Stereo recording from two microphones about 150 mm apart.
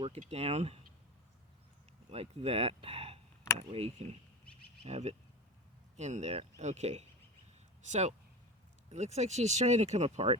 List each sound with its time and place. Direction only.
0.0 s speech: 40° right (ahead or behind)
2.0 s speech: 40° right (ahead or behind)